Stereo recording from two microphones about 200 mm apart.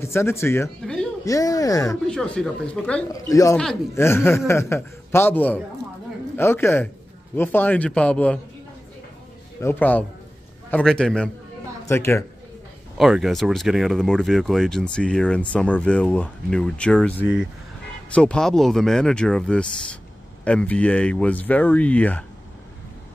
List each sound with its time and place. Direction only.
0.0 s speech: 10° left (ahead or behind)
2.0 s speech: 5° left (ahead or behind)
3.1 s speech: 15° left (ahead or behind)
9.6 s speech: 10° left (ahead or behind)
12.9 s speech: centre (ahead or behind)
17.2 s speech: 5° right (ahead or behind)
18.1 s speech: 5° left (ahead or behind)